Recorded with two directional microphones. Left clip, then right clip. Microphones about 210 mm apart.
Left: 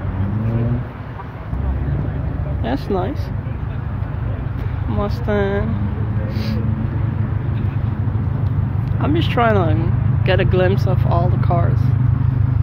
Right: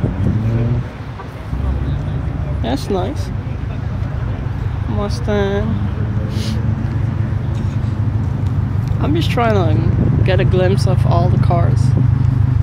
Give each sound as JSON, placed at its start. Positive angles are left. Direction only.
{"t": 2.6, "sound": "speech", "side_deg": -5}
{"t": 5.0, "sound": "speech", "side_deg": -10}
{"t": 9.0, "sound": "speech", "side_deg": -5}